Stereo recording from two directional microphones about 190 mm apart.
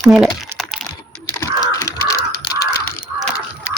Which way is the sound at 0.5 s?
Centre (ahead or behind).